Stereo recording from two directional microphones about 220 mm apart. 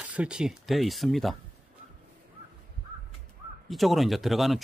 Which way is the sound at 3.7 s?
Centre (ahead or behind).